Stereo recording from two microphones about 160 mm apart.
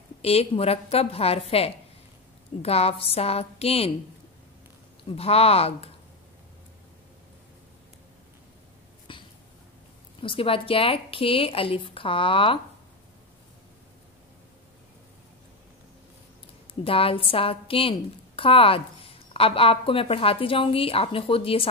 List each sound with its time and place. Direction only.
0.2 s a woman's voice: 40° left (ahead or behind)
5.1 s a woman's voice: 40° left (ahead or behind)
10.2 s a woman's voice: 35° left (ahead or behind)
16.8 s a woman's voice: 35° left (ahead or behind)